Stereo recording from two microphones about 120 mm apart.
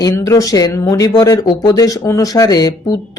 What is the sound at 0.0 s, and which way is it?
Speech, 25° left (ahead or behind).